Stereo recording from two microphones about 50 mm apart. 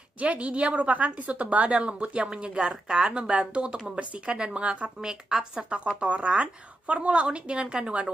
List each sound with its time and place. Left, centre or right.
0.2 s a woman's voice: right
5.0 s a woman's voice: centre